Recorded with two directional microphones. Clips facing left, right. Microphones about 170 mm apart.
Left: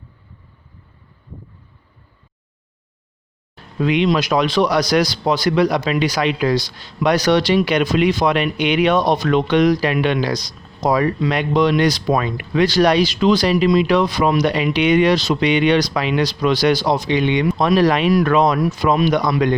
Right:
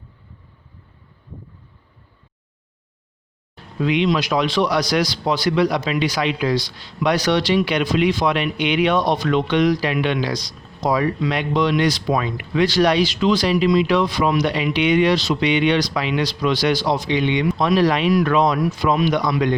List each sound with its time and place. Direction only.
3.8 s speech: 50° left (ahead or behind)